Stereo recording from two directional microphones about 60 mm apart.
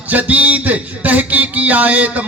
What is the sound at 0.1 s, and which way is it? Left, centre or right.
Speech, right.